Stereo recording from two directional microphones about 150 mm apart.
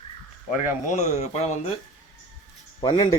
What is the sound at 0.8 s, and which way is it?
Speech, 55° left (ahead or behind).